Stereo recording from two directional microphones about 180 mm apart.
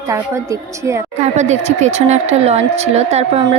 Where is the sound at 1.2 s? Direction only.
40° right (ahead or behind).